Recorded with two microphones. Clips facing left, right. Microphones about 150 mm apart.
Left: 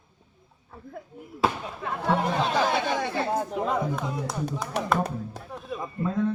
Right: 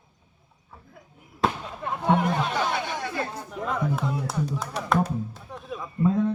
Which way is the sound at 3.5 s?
35° left (ahead or behind).